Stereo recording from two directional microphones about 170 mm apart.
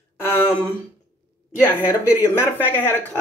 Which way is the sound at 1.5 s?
15° left (ahead or behind).